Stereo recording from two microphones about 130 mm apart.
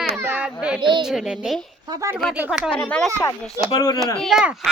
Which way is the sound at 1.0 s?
5° right (ahead or behind).